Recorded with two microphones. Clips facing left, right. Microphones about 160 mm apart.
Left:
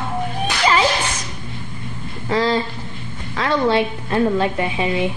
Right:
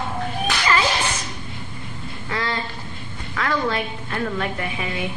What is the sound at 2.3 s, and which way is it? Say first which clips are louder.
A woman's voice: left 9 dB; 30° left (ahead or behind).